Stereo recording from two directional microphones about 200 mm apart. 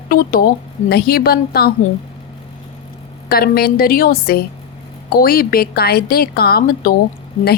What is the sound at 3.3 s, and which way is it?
A woman's voice, 50° left (ahead or behind).